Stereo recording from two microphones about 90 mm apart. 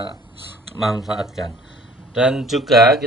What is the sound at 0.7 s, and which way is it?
Speech, 5° right (ahead or behind).